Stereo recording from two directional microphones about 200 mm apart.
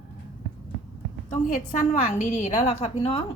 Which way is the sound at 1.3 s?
40° left (ahead or behind).